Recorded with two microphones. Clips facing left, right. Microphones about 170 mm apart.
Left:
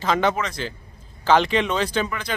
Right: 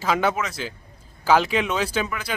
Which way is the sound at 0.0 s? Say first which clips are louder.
Left 1 dB; 5° right (ahead or behind).